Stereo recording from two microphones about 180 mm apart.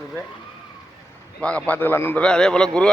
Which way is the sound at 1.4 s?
5° left (ahead or behind).